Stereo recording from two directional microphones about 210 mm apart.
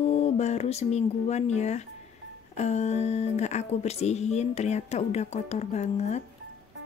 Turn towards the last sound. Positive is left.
turn(degrees=30)  # may be behind; listen again after turning